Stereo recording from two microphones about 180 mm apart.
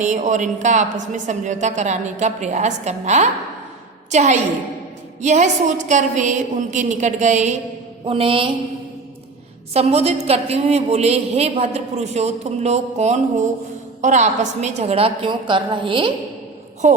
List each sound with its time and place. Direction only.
0.0 s a man's voice: 45° right (ahead or behind)
8.0 s mantra: 30° right (ahead or behind)
9.7 s a woman's voice: 35° right (ahead or behind)